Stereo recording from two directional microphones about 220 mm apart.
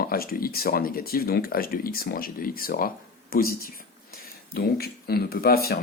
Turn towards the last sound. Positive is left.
turn(degrees=45)  # may be behind; listen again after turning